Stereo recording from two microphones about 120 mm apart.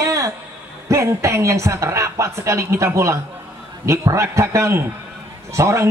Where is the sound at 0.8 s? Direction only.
25° right (ahead or behind).